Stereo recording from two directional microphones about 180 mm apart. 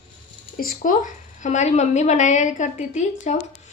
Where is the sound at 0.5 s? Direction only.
50° left (ahead or behind).